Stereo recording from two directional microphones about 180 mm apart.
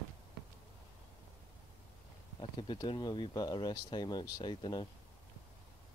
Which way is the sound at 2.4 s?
25° left (ahead or behind).